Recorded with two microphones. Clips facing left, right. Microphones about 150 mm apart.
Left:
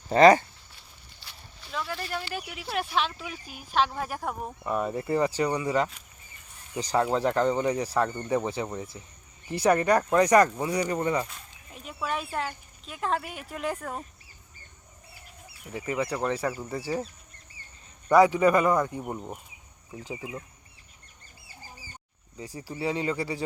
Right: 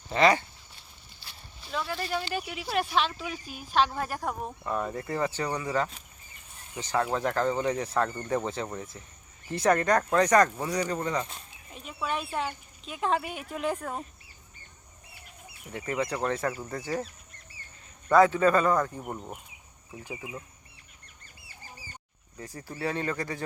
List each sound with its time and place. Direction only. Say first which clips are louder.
0.1 s speech: left 6 dB; 40° left (ahead or behind)
1.7 s a sound: right 1 dB; centre (ahead or behind)
2.5 s speech: right 1 dB; 5° right (ahead or behind); by 5.9 s 10° left (ahead or behind)
6.9 s speech: left 3 dB; 15° left (ahead or behind); by 14.0 s centre (ahead or behind)
15.7 s speech: left 1 dB; 5° left (ahead or behind)
18.1 s speech: left 1 dB; 15° left (ahead or behind)
20.1 s speech: left 2 dB; 15° right (ahead or behind)
22.4 s speech: left 2 dB; 10° left (ahead or behind)